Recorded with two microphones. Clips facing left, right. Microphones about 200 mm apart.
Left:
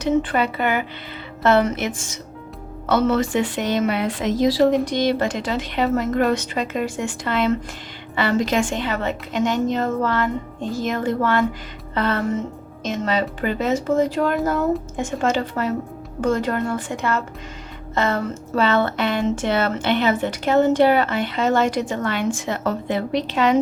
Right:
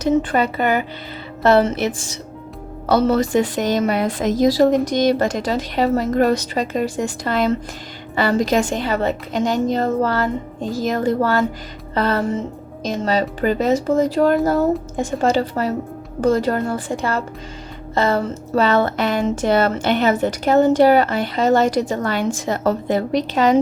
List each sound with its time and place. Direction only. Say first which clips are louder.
0.0 s speech: right 2 dB; 40° right (ahead or behind)